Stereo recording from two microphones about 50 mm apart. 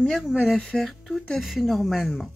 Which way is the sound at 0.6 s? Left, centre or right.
Centre.